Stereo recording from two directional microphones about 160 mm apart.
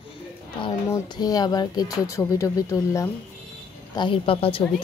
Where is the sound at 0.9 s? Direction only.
25° left (ahead or behind).